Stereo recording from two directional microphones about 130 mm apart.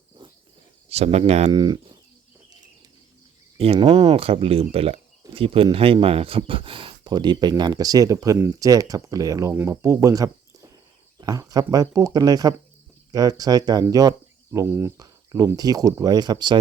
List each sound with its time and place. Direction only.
0.2 s cricket: 35° right (ahead or behind)
0.9 s speech: 50° right (ahead or behind)
1.5 s speech: 35° right (ahead or behind)
3.6 s speech: 50° right (ahead or behind)